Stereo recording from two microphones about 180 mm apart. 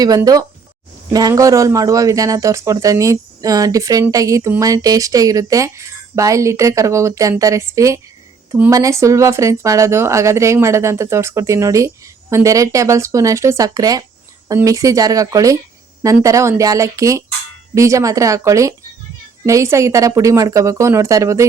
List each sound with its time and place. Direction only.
0.0 s speech: 20° right (ahead or behind)